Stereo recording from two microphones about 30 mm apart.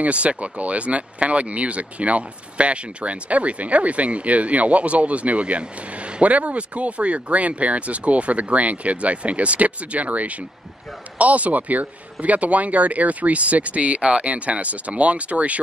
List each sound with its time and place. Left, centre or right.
0.0 s speech: right
6.2 s speech: right